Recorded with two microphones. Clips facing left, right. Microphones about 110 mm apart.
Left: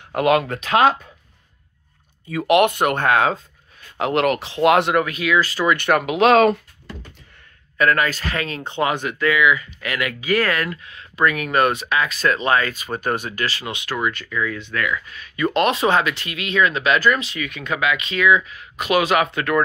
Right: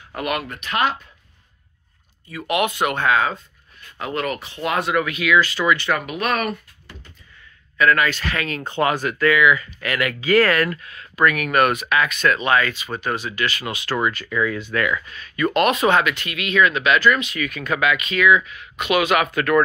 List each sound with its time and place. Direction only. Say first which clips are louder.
0.1 s speech: left 8 dB; 90° left
2.4 s speech: left 5 dB; 60° left (ahead or behind)
4.0 s speech: left 6 dB; 80° left
4.9 s speech: even; 40° left (ahead or behind)
5.8 s speech: left 6 dB; 65° left (ahead or behind); by 6.6 s 90° left
7.7 s speech: right 1 dB; 40° left (ahead or behind)
13.6 s speech: right 1 dB; 20° left (ahead or behind)
14.3 s speech: right 2 dB; 20° right (ahead or behind)
14.6 s speech: right 2 dB; 10° right (ahead or behind)
15.1 s speech: even; 15° left (ahead or behind); by 17.4 s 35° left (ahead or behind)
17.4 s speech: right 2 dB; 20° left (ahead or behind)